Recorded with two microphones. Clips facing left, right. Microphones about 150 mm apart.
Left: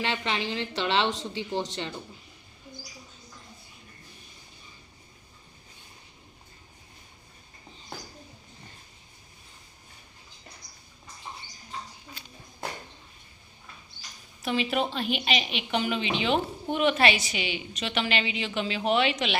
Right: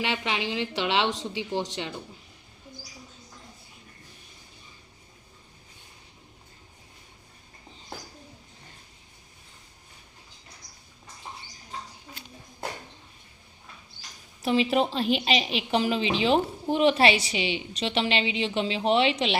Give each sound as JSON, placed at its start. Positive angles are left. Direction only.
{"t": 0.0, "sound": "a woman's voice", "side_deg": -10}
{"t": 14.4, "sound": "a woman's voice", "side_deg": -30}